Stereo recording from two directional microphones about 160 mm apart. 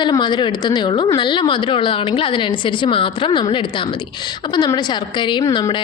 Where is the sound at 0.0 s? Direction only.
30° left (ahead or behind).